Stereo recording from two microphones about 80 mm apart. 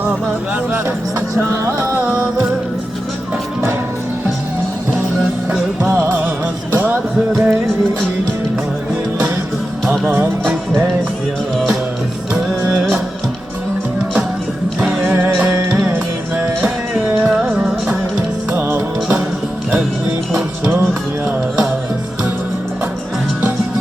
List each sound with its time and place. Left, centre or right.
1.4 s music: right
5.5 s music: right
10.1 s music: right
12.3 s music: centre
14.8 s music: centre